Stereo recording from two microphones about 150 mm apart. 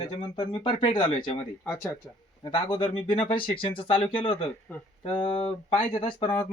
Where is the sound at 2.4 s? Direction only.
35° left (ahead or behind).